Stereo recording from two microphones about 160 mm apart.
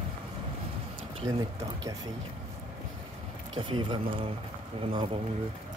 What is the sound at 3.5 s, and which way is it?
Speech, 30° right (ahead or behind).